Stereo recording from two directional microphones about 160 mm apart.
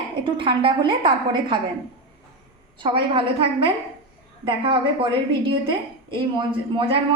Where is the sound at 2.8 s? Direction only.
30° right (ahead or behind).